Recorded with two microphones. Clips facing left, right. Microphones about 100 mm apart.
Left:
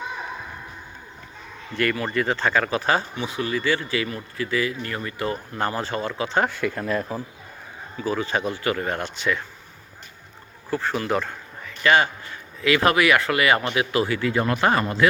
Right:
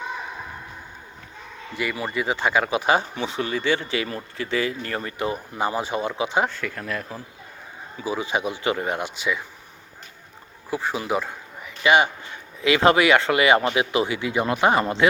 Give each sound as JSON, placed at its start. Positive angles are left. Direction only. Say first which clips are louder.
{"t": 1.7, "sound": "speech", "louder": "left 3 dB", "side_deg": -10}
{"t": 3.2, "sound": "speech", "louder": "even", "side_deg": -30}
{"t": 6.5, "sound": "speech", "louder": "left 5 dB", "side_deg": 20}
{"t": 8.0, "sound": "speech", "louder": "left 1 dB", "side_deg": -15}
{"t": 10.7, "sound": "speech", "louder": "left 1 dB", "side_deg": -10}